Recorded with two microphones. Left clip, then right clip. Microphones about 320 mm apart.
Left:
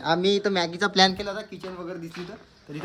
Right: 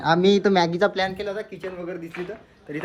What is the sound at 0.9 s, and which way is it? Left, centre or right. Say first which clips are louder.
Speech: left 4 dB; centre.